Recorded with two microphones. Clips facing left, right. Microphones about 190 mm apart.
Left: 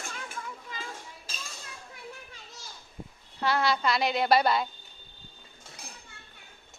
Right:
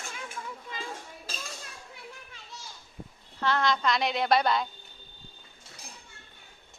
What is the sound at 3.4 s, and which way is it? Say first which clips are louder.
Speech: even; 10° left (ahead or behind).